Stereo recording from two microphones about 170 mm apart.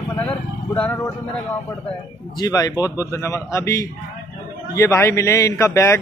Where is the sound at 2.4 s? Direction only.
20° left (ahead or behind).